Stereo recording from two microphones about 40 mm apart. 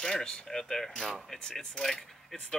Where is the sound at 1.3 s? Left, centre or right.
Centre.